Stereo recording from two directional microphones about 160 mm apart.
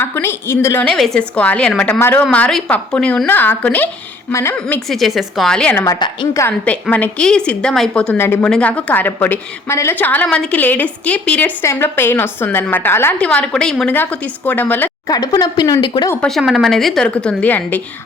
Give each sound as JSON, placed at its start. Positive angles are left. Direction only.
{"t": 0.0, "sound": "a woman's voice", "side_deg": 15}
{"t": 4.9, "sound": "a woman's voice", "side_deg": 0}
{"t": 5.7, "sound": "speech", "side_deg": 25}
{"t": 6.7, "sound": "a woman's voice", "side_deg": 10}
{"t": 15.1, "sound": "speech", "side_deg": 25}
{"t": 16.2, "sound": "a woman's voice", "side_deg": 0}